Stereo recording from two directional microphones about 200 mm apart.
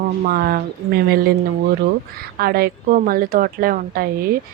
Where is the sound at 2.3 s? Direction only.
50° right (ahead or behind).